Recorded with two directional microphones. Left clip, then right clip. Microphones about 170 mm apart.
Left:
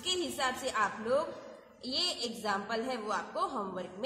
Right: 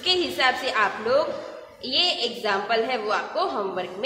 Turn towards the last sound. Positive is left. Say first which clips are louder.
# right 10 dB
turn(degrees=35)  # may be behind; listen again after turning